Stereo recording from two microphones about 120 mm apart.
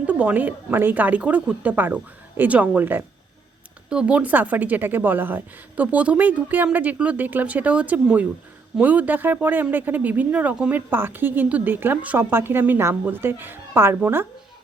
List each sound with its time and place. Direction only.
0.0 s speech: 10° right (ahead or behind)